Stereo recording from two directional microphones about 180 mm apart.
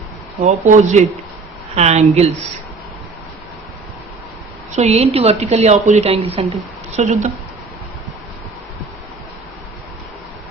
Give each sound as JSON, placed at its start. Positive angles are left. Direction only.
{"t": 0.4, "sound": "a woman's voice", "side_deg": -40}
{"t": 4.7, "sound": "a woman's voice", "side_deg": -35}